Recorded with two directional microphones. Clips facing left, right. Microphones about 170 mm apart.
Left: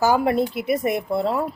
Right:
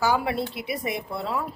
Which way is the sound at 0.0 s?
45° left (ahead or behind).